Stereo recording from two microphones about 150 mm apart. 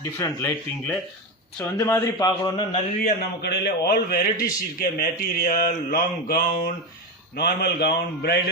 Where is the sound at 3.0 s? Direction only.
90° left; by 5.1 s 75° left (ahead or behind).